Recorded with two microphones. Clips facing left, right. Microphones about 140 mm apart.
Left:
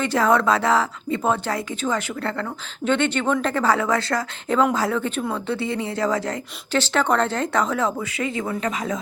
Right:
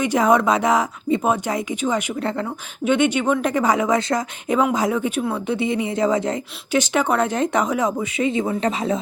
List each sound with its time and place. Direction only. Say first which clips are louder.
0.0 s speech: right 2 dB; 15° right (ahead or behind)